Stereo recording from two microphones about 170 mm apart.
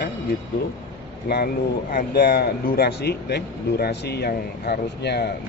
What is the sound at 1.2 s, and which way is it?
Speech, 65° left (ahead or behind).